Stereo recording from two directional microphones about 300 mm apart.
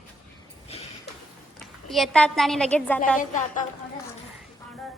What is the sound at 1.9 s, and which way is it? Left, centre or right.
A woman's voice, centre.